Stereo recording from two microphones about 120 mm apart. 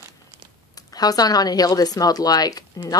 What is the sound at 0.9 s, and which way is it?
A woman's voice, 35° left (ahead or behind).